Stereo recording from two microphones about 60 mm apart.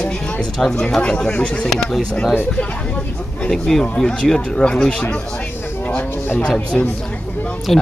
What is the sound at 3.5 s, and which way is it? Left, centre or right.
Speech, centre.